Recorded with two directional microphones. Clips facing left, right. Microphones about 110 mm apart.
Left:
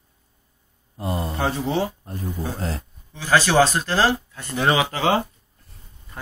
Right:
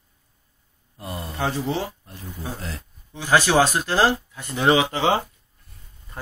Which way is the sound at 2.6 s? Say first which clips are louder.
Left 6 dB; 40° left (ahead or behind).